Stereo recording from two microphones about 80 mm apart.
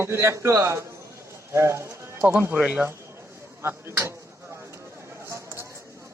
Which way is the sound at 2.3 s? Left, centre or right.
Right.